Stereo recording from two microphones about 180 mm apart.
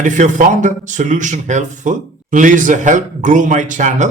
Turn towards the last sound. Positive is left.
turn(degrees=-45)  # may be behind; listen again after turning